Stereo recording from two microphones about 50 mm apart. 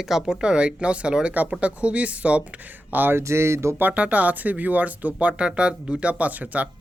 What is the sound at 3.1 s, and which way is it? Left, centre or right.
Speech, right.